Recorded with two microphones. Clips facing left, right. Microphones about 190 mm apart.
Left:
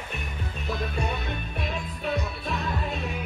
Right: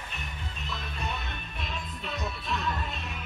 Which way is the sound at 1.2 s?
55° left (ahead or behind).